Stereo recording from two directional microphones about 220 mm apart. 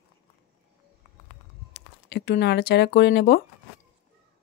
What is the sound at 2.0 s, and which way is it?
Speech, 50° left (ahead or behind).